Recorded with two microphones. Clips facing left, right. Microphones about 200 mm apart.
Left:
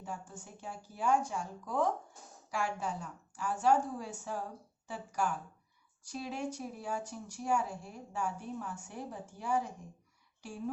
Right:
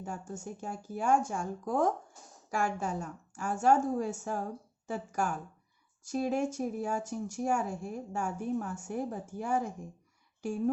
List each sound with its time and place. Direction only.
0.0 s speech: 45° right (ahead or behind)